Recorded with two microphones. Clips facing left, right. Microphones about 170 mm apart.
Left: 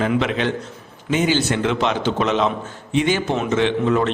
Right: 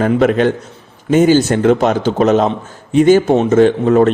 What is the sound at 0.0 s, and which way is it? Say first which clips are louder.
A man's voice: right 8 dB; 45° right (ahead or behind).